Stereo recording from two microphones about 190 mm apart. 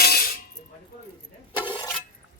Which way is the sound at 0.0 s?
55° left (ahead or behind).